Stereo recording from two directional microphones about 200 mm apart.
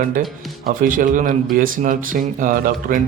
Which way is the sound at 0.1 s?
45° right (ahead or behind).